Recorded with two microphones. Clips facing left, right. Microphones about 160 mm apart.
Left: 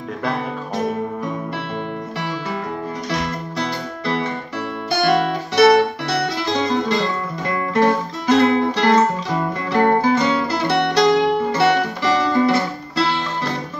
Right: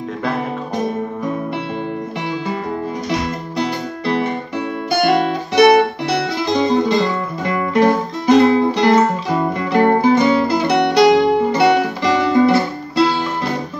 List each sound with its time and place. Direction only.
3.1 s music: 15° right (ahead or behind)
5.6 s music: 15° right (ahead or behind)